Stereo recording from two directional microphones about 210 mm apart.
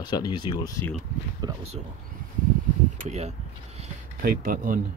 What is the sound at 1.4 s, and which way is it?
Speech, 20° right (ahead or behind).